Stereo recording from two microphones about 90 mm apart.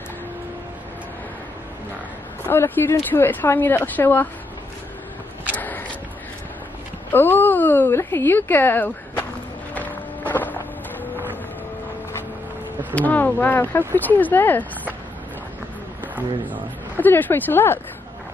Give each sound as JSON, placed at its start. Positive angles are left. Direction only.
{"t": 2.4, "sound": "a woman's voice", "side_deg": 25}
{"t": 7.1, "sound": "a woman's voice", "side_deg": 25}
{"t": 10.3, "sound": "a sound", "side_deg": 20}
{"t": 12.9, "sound": "a woman's voice", "side_deg": 20}
{"t": 16.2, "sound": "speech", "side_deg": -15}
{"t": 16.9, "sound": "a woman's voice", "side_deg": 20}